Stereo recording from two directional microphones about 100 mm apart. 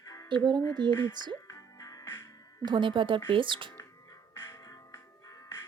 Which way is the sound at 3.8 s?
35° left (ahead or behind).